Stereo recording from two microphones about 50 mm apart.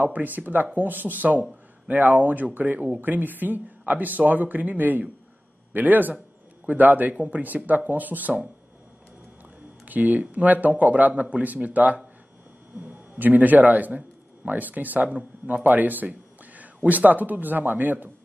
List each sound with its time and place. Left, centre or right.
0.0 s a man's voice: right
9.8 s a man's voice: right